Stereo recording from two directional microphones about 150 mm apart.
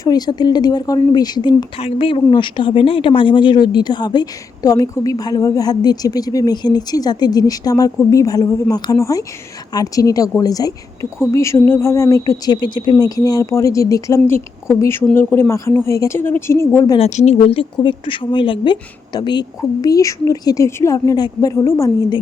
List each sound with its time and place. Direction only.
0.0 s speech: 25° left (ahead or behind)
1.8 s speech: 40° left (ahead or behind); by 17.0 s 20° left (ahead or behind)
17.0 s speech: 50° left (ahead or behind); by 21.9 s 20° left (ahead or behind)